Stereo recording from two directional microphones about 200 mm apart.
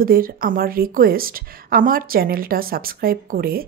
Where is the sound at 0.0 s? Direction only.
45° right (ahead or behind).